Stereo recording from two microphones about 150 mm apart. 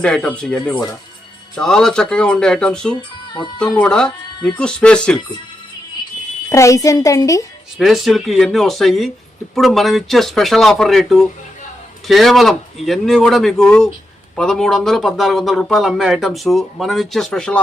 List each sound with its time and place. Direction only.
0.0 s speech: 5° left (ahead or behind)
6.5 s speech: 20° left (ahead or behind)
7.8 s speech: centre (ahead or behind)